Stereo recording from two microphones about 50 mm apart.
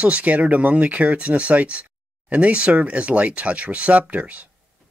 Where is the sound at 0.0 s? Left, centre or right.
Right.